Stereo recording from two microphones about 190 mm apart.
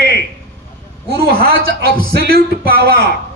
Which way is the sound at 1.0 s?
55° right (ahead or behind).